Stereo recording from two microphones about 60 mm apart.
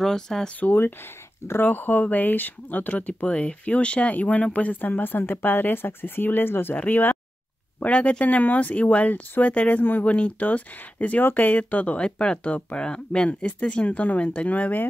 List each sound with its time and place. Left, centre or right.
0.0 s speech: centre
0.6 s speech: left